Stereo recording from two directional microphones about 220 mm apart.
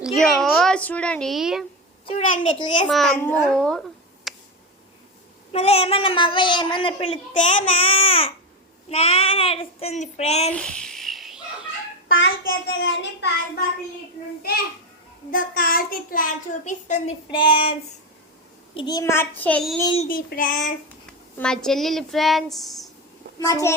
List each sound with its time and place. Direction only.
0.0 s a sound: centre (ahead or behind)
2.0 s a child's voice: 30° left (ahead or behind)
2.9 s a child's voice: centre (ahead or behind)
5.5 s a woman's voice: 25° left (ahead or behind)
10.5 s babbling: 5° left (ahead or behind)
12.0 s a child's voice: 55° left (ahead or behind)
15.3 s a child's voice: 40° left (ahead or behind)
17.3 s a woman's voice: 20° left (ahead or behind); by 19.7 s 5° left (ahead or behind)
19.8 s a woman's voice: 20° left (ahead or behind)
20.1 s a child's voice: 40° left (ahead or behind)
21.1 s a woman's voice: 5° left (ahead or behind)
23.4 s a child's voice: 15° left (ahead or behind)